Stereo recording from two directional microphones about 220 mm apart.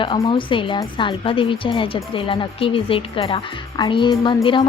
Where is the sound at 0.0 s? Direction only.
20° left (ahead or behind).